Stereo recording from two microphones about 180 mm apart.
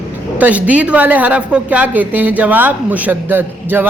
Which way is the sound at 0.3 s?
10° right (ahead or behind).